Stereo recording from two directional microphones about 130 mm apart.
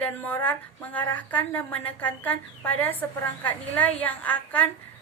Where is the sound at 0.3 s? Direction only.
10° left (ahead or behind).